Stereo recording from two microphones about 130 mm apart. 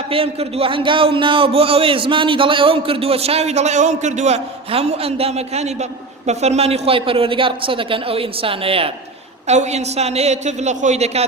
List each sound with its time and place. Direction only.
0.1 s a man's voice: 45° right (ahead or behind)
9.5 s a woman's voice: 60° right (ahead or behind)